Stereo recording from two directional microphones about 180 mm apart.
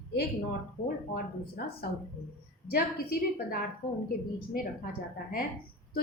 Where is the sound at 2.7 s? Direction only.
55° left (ahead or behind).